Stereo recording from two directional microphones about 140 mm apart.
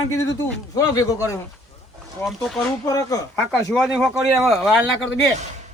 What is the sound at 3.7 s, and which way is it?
Speech, centre (ahead or behind).